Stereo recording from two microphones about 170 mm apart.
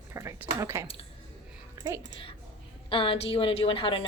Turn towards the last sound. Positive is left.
turn(degrees=30)  # may be behind; listen again after turning